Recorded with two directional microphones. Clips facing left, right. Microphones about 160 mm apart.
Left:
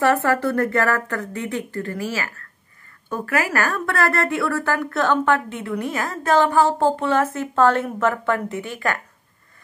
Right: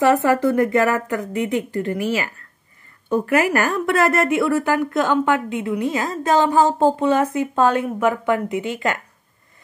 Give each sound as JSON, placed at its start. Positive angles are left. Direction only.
{"t": 0.0, "sound": "speech", "side_deg": -15}